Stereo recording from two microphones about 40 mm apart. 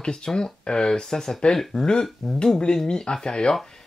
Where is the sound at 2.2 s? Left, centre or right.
Centre.